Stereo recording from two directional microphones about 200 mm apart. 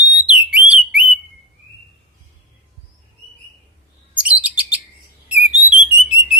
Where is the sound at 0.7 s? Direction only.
5° right (ahead or behind).